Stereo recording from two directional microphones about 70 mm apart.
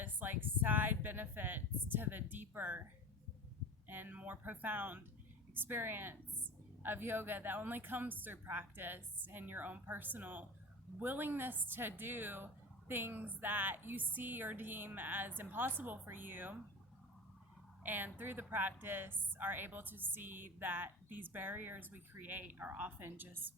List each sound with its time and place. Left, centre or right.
0.0 s a sound: right
3.8 s a woman's voice: right
17.8 s a woman's voice: right